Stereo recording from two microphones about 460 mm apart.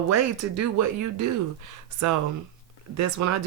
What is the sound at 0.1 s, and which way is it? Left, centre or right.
Speech, right.